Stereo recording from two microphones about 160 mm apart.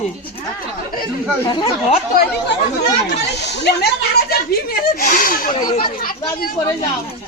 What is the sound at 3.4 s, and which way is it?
Speech, 90° left.